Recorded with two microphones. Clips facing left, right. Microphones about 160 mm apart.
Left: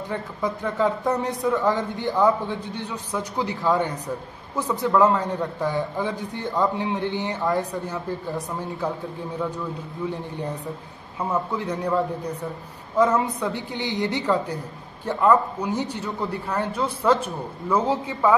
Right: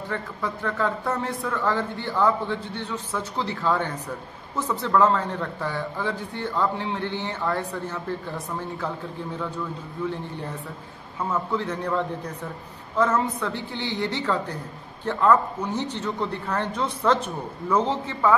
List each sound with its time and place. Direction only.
0.1 s speech: 15° left (ahead or behind)
11.1 s speech: 15° left (ahead or behind)